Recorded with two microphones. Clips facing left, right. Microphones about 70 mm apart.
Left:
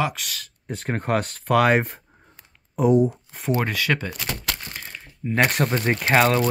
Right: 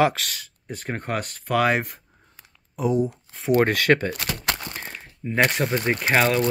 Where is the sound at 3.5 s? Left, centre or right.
Centre.